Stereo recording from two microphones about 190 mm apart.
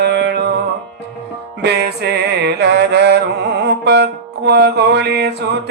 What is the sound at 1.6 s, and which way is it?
Music, 60° right (ahead or behind).